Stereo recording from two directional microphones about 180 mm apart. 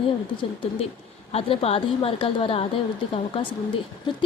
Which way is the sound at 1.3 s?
35° left (ahead or behind).